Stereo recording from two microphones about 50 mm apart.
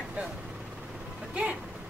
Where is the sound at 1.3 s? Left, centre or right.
Right.